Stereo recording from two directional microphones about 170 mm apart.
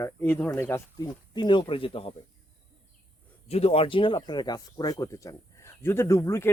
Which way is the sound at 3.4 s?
35° left (ahead or behind).